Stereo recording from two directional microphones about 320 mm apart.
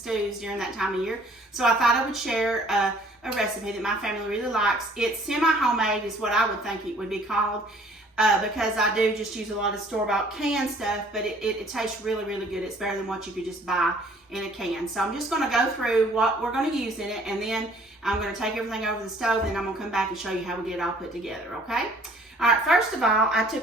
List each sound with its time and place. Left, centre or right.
0.1 s a woman's voice: centre
3.8 s a woman's voice: centre
14.3 s a woman's voice: centre